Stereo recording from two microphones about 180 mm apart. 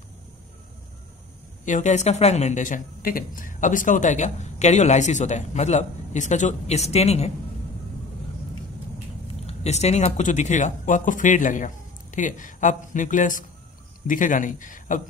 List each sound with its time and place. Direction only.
1.6 s speech: 45° left (ahead or behind)
9.5 s speech: 40° left (ahead or behind)